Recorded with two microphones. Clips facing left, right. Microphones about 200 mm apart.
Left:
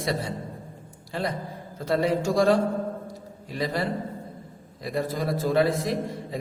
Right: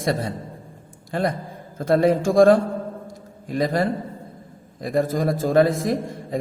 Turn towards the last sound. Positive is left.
turn(degrees=-50)  # may be behind; listen again after turning